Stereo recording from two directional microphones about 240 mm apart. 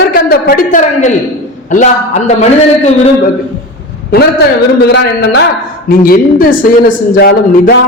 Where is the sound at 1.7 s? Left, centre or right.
Left.